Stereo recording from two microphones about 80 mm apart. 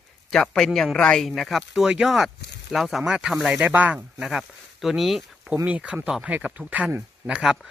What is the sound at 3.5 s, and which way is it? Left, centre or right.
Speech, right.